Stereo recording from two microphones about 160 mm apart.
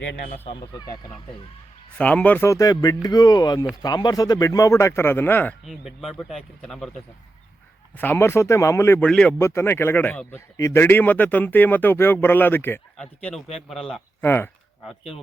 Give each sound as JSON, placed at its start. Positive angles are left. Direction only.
{"t": 2.0, "sound": "speech", "side_deg": 5}
{"t": 5.6, "sound": "speech", "side_deg": 0}
{"t": 7.9, "sound": "a man's voice", "side_deg": 15}
{"t": 9.4, "sound": "a man's voice", "side_deg": 15}
{"t": 14.3, "sound": "a man's voice", "side_deg": 15}